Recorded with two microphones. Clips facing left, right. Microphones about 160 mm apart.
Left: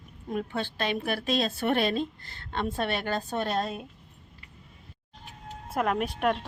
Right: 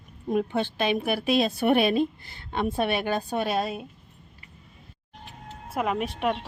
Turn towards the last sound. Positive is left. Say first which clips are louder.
# even
turn(degrees=0)  # may be behind; listen again after turning